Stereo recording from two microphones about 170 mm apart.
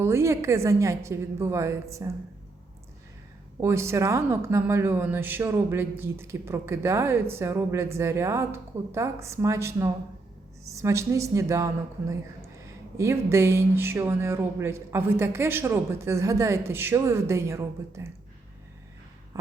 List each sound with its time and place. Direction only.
0.0 s speech: 15° right (ahead or behind)
3.6 s speech: 15° right (ahead or behind)